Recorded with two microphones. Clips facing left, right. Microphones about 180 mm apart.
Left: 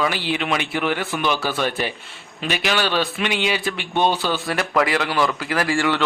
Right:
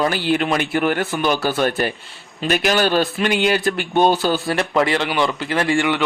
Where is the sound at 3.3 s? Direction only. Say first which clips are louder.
Right 5 dB; centre (ahead or behind).